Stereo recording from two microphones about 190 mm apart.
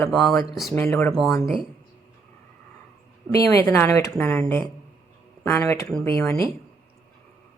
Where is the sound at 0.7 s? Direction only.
10° left (ahead or behind).